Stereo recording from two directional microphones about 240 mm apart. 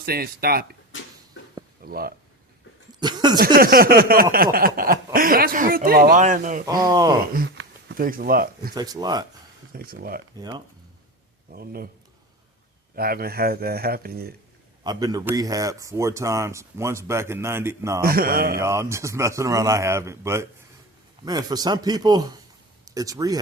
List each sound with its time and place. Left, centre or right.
0.0 s speech: right
1.8 s speech: right
3.0 s speech: centre
3.3 s speech: right
6.8 s speech: centre
7.9 s speech: right
8.7 s speech: centre
9.7 s speech: right
10.3 s speech: centre
11.5 s speech: right
13.0 s speech: right
14.8 s speech: centre
18.0 s speech: right
18.6 s speech: centre